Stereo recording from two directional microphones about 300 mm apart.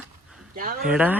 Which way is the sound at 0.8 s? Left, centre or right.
Centre.